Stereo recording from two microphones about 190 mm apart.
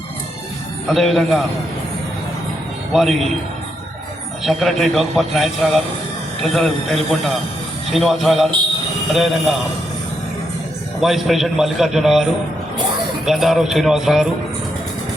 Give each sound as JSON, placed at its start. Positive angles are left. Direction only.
{"t": 0.9, "sound": "a man's voice", "side_deg": 0}
{"t": 2.9, "sound": "a man's voice", "side_deg": 0}
{"t": 4.4, "sound": "a man's voice", "side_deg": 0}
{"t": 11.0, "sound": "a man's voice", "side_deg": 0}